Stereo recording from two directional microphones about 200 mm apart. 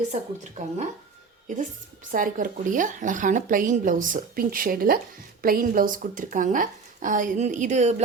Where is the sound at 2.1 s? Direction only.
40° right (ahead or behind).